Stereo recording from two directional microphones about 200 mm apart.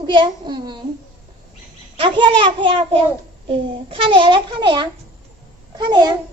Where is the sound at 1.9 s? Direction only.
25° right (ahead or behind).